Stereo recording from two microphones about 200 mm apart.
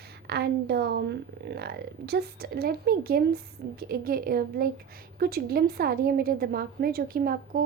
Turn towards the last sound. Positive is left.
turn(degrees=-45)  # may be behind; listen again after turning